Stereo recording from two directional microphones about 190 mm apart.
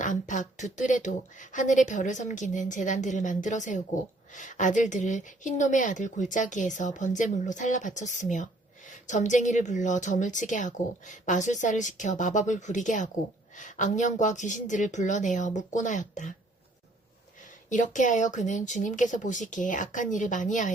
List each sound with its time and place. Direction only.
0.0 s a woman's voice: 40° left (ahead or behind)
17.7 s a woman's voice: 40° left (ahead or behind)